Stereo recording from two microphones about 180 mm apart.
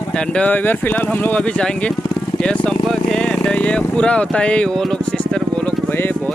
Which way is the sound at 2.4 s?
5° left (ahead or behind).